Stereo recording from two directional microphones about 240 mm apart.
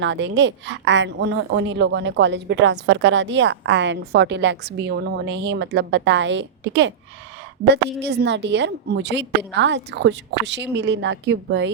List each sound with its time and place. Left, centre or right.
0.0 s a woman's voice: right
8.0 s a woman's voice: right